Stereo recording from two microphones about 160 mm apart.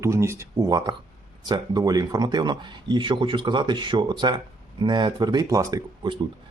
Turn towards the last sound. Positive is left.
turn(degrees=-25)  # may be behind; listen again after turning